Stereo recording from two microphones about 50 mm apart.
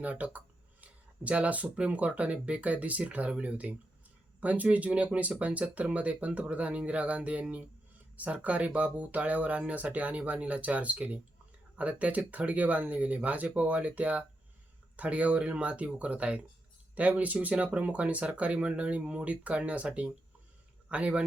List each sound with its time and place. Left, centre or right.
0.0 s speech: right